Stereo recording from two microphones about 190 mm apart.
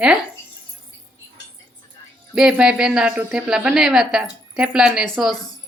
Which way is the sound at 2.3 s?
5° right (ahead or behind).